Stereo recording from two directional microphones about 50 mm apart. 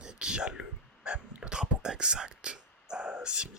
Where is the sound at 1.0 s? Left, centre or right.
Right.